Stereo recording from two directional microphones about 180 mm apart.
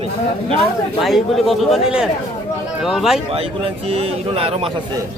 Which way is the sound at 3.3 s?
35° right (ahead or behind).